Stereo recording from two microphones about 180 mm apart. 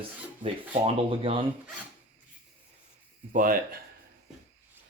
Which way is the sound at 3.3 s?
50° right (ahead or behind).